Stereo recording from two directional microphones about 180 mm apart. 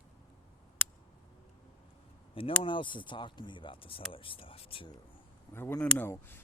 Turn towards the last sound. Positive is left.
turn(degrees=10)  # may be behind; listen again after turning